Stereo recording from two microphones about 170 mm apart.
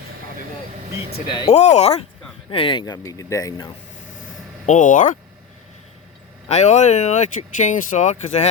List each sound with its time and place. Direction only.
1.3 s speech: 30° left (ahead or behind)
1.5 s speech: 40° left (ahead or behind); by 3.7 s 20° left (ahead or behind)
4.6 s speech: 50° left (ahead or behind)
6.5 s speech: 40° left (ahead or behind)